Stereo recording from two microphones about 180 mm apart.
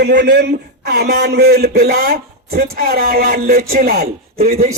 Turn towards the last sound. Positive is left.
turn(degrees=-55)  # may be behind; listen again after turning